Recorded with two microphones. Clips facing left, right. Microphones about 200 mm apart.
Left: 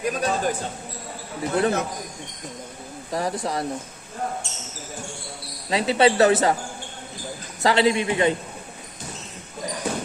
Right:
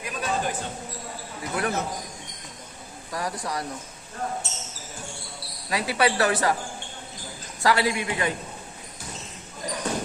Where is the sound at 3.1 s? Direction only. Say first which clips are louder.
Left 5 dB; 25° left (ahead or behind).